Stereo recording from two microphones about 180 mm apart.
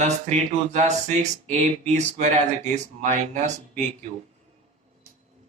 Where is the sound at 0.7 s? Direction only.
40° right (ahead or behind).